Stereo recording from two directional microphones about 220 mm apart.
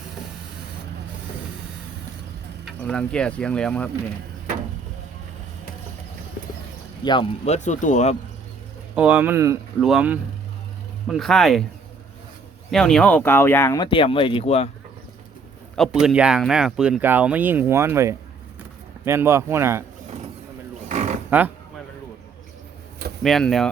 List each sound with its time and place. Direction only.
2.6 s speech: 5° left (ahead or behind)
7.0 s speech: 20° left (ahead or behind)
9.0 s speech: 5° right (ahead or behind)
12.7 s speech: 5° left (ahead or behind); by 14.7 s 30° left (ahead or behind)
15.7 s speech: centre (ahead or behind)
20.8 s livestock: 30° right (ahead or behind)
21.2 s speech: 10° right (ahead or behind)
23.2 s speech: centre (ahead or behind)